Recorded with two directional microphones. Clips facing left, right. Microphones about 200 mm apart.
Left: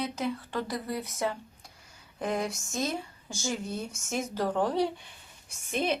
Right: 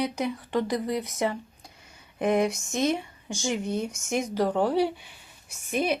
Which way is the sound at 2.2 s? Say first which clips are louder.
Right 7 dB; 20° right (ahead or behind).